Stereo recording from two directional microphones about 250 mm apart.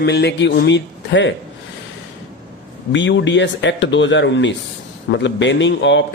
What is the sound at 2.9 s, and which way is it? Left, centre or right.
A man's voice, left.